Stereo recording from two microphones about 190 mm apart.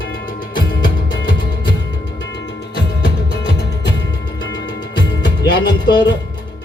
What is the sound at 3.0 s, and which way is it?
Music, 65° left (ahead or behind).